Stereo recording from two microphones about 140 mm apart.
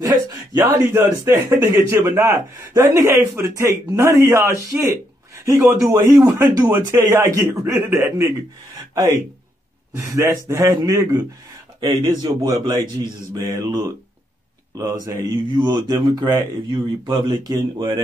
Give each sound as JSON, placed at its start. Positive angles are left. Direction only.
{"t": 0.0, "sound": "speech", "side_deg": -25}
{"t": 5.3, "sound": "a sound", "side_deg": -20}
{"t": 6.2, "sound": "speech", "side_deg": -25}
{"t": 8.7, "sound": "a sound", "side_deg": -25}
{"t": 9.9, "sound": "speech", "side_deg": -20}
{"t": 15.0, "sound": "speech", "side_deg": -25}